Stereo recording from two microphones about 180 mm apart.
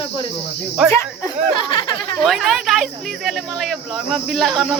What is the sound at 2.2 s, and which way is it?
Speech, centre (ahead or behind).